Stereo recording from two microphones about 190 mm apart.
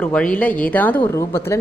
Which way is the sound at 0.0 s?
5° left (ahead or behind).